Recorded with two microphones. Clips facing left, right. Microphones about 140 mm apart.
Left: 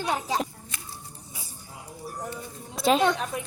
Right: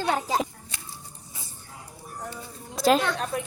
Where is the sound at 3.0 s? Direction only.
20° left (ahead or behind).